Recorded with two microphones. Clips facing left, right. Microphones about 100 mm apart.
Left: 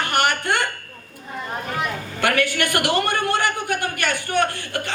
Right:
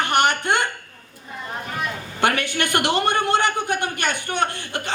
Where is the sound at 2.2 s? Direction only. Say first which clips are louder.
Left 1 dB; 25° right (ahead or behind).